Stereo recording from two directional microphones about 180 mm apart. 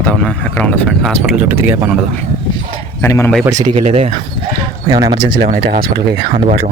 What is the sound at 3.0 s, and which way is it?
Speech, 15° left (ahead or behind).